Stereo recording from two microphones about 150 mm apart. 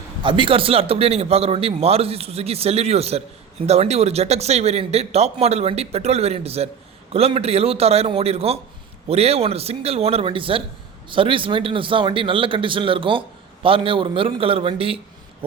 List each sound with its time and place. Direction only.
0.2 s speech: 35° right (ahead or behind)